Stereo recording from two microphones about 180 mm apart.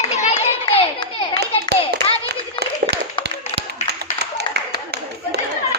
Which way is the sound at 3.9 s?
65° right (ahead or behind).